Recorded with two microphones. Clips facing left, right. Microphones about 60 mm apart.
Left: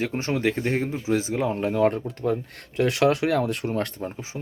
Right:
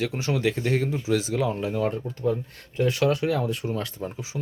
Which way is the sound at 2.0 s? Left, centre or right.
Left.